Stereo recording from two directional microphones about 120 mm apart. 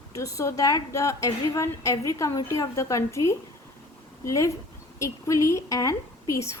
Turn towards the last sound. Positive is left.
turn(degrees=25)  # may be behind; listen again after turning